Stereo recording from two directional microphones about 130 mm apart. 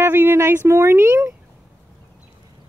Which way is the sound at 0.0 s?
15° right (ahead or behind).